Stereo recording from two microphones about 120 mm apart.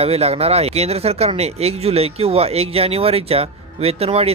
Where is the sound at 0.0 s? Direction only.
60° right (ahead or behind).